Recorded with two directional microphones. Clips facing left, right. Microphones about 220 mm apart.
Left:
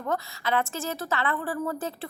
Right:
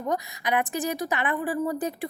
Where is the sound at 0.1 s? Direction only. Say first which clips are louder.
Right 1 dB; 15° right (ahead or behind).